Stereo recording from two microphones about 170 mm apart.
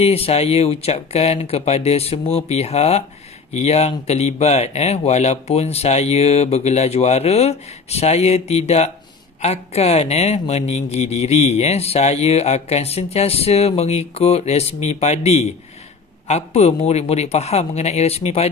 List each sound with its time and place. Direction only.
0.0 s speech: 35° left (ahead or behind)